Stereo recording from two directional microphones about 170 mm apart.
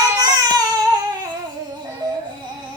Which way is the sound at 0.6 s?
20° right (ahead or behind).